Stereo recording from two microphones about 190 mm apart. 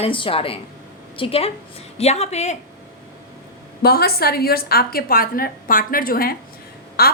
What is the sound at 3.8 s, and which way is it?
A woman's voice, 55° left (ahead or behind).